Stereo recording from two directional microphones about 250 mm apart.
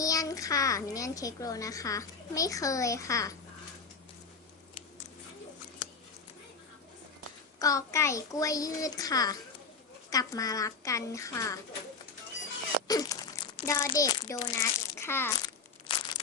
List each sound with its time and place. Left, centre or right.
0.0 s a child's voice: centre
7.6 s a child's voice: centre
12.9 s crumpling: centre
14.0 s a child's voice: centre
15.9 s crumpling: centre